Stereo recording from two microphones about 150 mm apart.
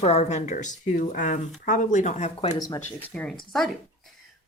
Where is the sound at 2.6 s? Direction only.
20° left (ahead or behind).